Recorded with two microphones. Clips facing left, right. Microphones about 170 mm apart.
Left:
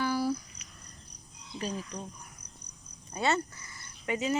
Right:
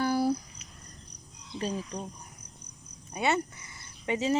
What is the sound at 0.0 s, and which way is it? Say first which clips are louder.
Cricket: right 3 dB; 50° right (ahead or behind).